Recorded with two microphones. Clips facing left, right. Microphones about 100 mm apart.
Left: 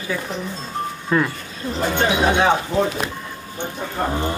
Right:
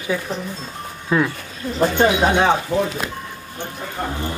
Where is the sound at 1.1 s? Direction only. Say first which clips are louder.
Right 1 dB; 5° right (ahead or behind).